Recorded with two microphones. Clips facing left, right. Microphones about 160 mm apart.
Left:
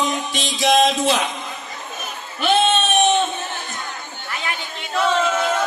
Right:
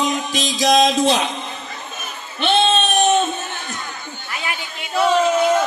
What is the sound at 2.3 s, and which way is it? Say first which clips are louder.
Child singing: even; 30° right (ahead or behind).